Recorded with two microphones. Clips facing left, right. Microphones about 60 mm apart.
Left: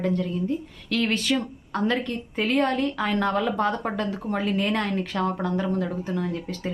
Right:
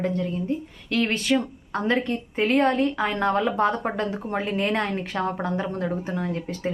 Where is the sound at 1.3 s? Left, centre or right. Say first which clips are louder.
Right 2 dB; centre.